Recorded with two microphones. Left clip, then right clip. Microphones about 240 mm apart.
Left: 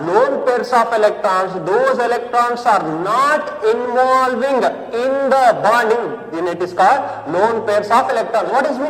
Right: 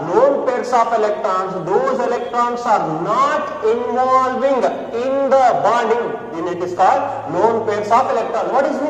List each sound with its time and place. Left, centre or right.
0.1 s a man's voice: left